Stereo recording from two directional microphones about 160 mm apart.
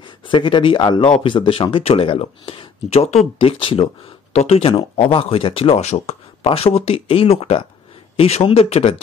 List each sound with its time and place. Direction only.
0.3 s speech: 30° left (ahead or behind)